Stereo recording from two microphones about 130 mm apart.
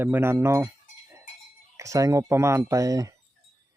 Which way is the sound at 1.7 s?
25° right (ahead or behind).